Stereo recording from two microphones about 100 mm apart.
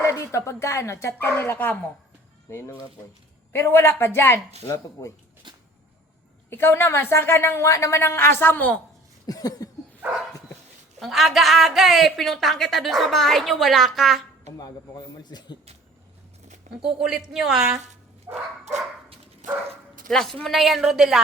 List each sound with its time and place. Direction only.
0.0 s a woman's voice: 30° left (ahead or behind)
3.5 s a woman's voice: 25° left (ahead or behind)
4.7 s a sound: 30° left (ahead or behind)
5.4 s cupboard open or close: 50° right (ahead or behind)
6.5 s a woman's voice: 20° left (ahead or behind)
9.2 s a sound: 40° left (ahead or behind)
11.0 s a woman's voice: centre (ahead or behind)
14.6 s a man's voice: 40° left (ahead or behind)
16.8 s a woman's voice: 5° right (ahead or behind)
18.3 s bow-wow: 20° right (ahead or behind)
20.1 s a woman's voice: 5° left (ahead or behind)